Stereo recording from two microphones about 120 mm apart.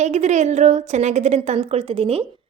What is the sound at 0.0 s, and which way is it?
A woman's voice, 70° right (ahead or behind).